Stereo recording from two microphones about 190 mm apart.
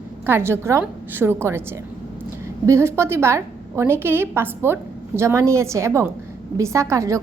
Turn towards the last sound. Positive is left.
turn(degrees=-15)  # may be behind; listen again after turning